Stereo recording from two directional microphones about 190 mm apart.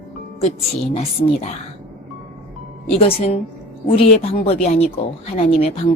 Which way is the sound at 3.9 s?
30° left (ahead or behind).